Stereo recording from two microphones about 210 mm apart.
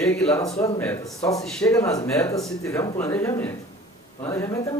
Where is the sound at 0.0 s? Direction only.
5° left (ahead or behind).